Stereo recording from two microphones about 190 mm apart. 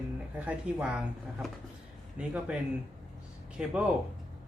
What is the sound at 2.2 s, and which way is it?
Speech, 5° right (ahead or behind).